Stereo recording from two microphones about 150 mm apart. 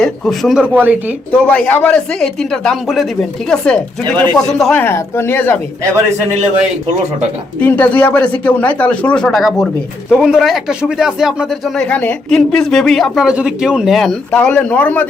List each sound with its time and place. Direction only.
0.0 s speech: centre (ahead or behind)
1.3 s speech: 10° left (ahead or behind)
4.8 s speech: 15° left (ahead or behind)
7.6 s speech: 10° left (ahead or behind)